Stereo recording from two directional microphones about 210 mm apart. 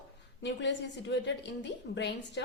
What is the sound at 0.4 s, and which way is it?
A woman's voice, 55° left (ahead or behind).